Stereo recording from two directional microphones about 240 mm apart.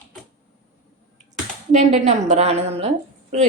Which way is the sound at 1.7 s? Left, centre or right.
Right.